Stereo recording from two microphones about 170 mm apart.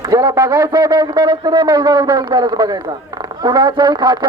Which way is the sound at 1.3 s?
25° right (ahead or behind).